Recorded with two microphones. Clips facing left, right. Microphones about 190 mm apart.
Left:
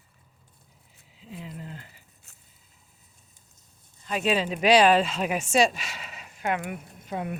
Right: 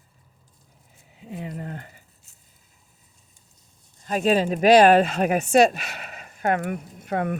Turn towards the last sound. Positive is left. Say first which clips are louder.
# right 7 dB
turn(degrees=-65)  # may be behind; listen again after turning